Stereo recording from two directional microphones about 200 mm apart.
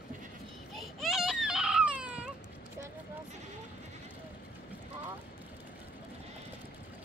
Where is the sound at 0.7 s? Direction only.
Centre (ahead or behind).